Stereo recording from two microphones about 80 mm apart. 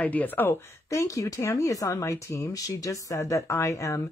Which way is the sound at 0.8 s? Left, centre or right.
Left.